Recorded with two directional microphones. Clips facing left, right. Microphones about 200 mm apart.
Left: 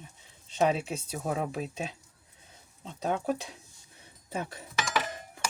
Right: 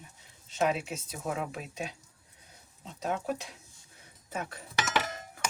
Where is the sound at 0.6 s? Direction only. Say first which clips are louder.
Left 3 dB; 30° left (ahead or behind).